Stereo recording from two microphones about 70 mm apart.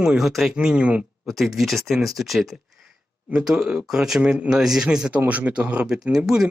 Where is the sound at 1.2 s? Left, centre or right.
Centre.